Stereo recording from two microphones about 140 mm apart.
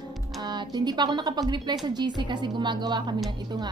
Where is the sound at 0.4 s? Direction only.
30° right (ahead or behind).